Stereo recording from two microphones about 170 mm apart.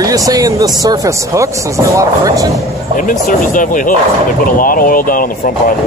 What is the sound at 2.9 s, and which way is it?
Speech, 50° left (ahead or behind).